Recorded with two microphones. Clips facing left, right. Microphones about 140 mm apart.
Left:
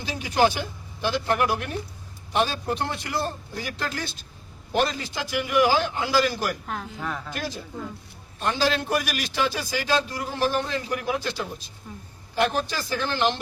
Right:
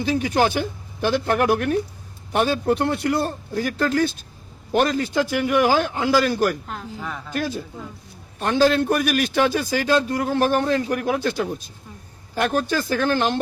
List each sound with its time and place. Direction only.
0.0 s a man's voice: 50° right (ahead or behind)
6.7 s a woman's voice: centre (ahead or behind)
7.3 s a man's voice: 50° right (ahead or behind)